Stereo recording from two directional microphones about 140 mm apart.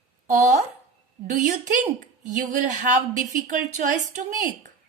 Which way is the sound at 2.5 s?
60° right (ahead or behind).